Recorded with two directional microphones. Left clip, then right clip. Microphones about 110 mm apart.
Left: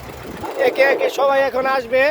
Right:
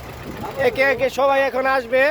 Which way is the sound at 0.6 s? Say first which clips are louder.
Left 2 dB; 25° right (ahead or behind).